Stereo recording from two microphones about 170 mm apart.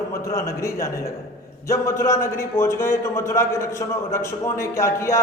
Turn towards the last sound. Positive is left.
turn(degrees=15)  # may be behind; listen again after turning